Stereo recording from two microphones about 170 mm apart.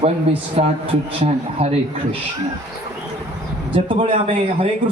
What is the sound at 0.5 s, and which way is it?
A man's voice, 35° right (ahead or behind).